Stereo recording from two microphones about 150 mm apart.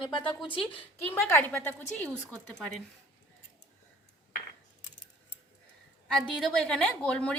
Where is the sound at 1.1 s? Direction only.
15° left (ahead or behind).